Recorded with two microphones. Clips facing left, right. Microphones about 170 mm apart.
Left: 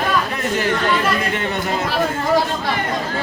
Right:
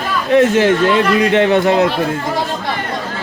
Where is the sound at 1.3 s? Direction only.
80° right.